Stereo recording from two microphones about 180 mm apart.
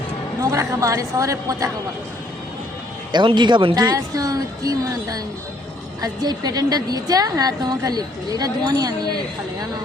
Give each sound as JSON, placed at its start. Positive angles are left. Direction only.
{"t": 0.4, "sound": "a woman's voice", "side_deg": -15}
{"t": 3.1, "sound": "a woman's voice", "side_deg": -25}